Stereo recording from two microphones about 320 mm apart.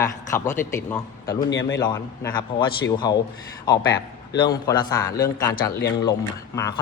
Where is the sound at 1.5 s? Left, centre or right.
Left.